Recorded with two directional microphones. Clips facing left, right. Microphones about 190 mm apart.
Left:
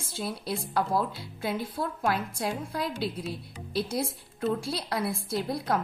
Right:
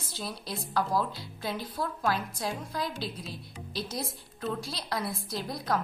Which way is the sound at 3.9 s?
30° left (ahead or behind).